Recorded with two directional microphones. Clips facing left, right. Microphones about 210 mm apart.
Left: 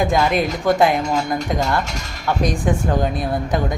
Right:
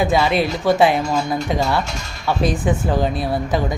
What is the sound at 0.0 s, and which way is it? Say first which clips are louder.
Speech: right 1 dB; 5° right (ahead or behind).